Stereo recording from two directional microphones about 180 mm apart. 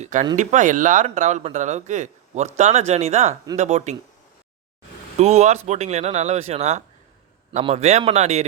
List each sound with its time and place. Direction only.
0.0 s speech: 45° right (ahead or behind)
5.1 s speech: 40° right (ahead or behind)